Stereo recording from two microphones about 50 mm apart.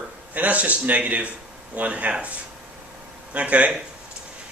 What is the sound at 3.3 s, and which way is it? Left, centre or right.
Speech, right.